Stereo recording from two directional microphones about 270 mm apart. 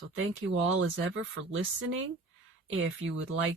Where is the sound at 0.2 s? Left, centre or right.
Right.